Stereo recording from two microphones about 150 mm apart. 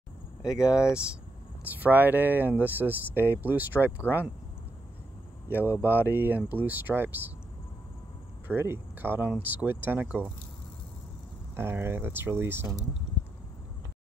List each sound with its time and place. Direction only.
1.7 s speech: 10° right (ahead or behind)
5.5 s speech: 10° right (ahead or behind)
8.5 s speech: 15° right (ahead or behind)
11.5 s speech: 15° right (ahead or behind)